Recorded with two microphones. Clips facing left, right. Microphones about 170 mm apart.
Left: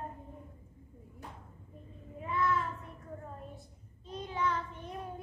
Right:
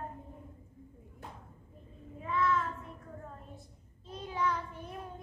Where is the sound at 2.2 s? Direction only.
5° left (ahead or behind).